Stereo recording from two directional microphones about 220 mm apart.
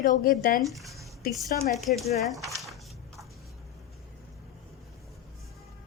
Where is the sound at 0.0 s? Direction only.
40° left (ahead or behind).